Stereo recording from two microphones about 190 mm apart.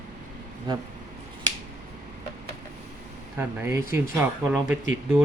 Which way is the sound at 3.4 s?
10° right (ahead or behind).